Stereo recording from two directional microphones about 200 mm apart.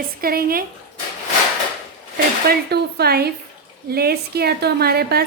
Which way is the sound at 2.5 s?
55° right (ahead or behind).